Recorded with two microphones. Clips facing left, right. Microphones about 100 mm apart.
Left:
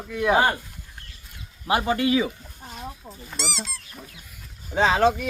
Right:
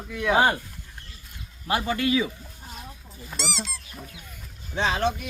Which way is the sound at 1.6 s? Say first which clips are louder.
Left 3 dB; 15° left (ahead or behind).